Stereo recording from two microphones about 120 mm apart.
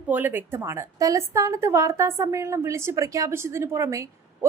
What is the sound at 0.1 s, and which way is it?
A woman's voice, 15° right (ahead or behind).